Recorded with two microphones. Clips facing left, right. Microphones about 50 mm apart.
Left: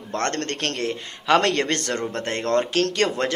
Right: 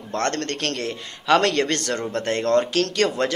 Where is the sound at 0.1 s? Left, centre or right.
Left.